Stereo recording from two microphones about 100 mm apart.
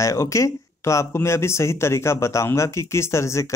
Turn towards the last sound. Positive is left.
turn(degrees=30)  # may be behind; listen again after turning